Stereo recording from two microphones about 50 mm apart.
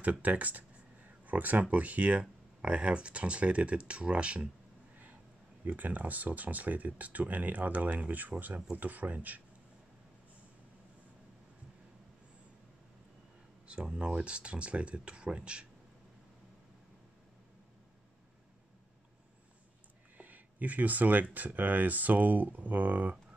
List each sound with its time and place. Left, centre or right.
0.0 s speech: right
5.7 s speech: right
13.7 s speech: centre
20.2 s speech: right